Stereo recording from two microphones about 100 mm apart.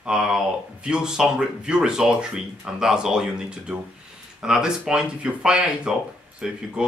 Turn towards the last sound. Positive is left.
turn(degrees=-5)  # may be behind; listen again after turning